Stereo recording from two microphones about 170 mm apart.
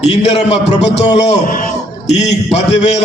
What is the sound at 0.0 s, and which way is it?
A man's voice, 40° left (ahead or behind).